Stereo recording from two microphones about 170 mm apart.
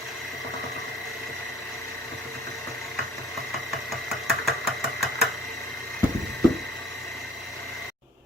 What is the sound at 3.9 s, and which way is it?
Engine, centre (ahead or behind).